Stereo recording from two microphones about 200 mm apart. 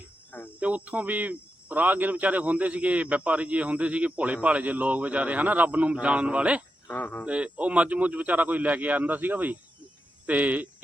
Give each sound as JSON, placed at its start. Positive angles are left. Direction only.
{"t": 0.6, "sound": "speech", "side_deg": -5}
{"t": 6.8, "sound": "speech", "side_deg": 10}
{"t": 7.3, "sound": "speech", "side_deg": -5}